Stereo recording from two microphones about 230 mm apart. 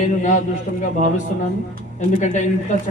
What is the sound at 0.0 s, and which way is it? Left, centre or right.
Speech, left.